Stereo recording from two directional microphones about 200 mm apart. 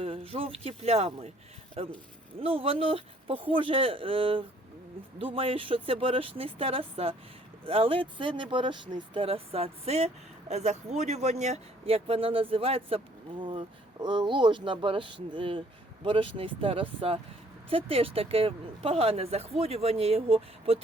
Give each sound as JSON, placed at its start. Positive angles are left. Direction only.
{"t": 0.0, "sound": "speech", "side_deg": -30}